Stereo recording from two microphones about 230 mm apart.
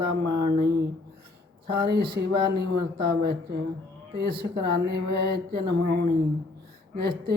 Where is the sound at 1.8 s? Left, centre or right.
Right.